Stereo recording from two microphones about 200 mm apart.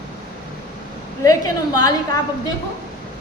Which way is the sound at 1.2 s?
15° left (ahead or behind).